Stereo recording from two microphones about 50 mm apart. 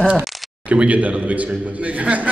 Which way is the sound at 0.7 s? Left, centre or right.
Right.